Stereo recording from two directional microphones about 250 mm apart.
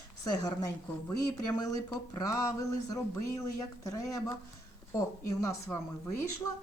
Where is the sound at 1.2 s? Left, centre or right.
Centre.